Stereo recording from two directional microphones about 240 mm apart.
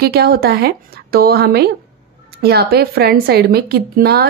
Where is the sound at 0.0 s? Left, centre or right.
Right.